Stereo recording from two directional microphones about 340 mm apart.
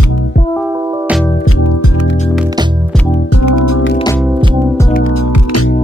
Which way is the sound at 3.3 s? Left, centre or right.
Left.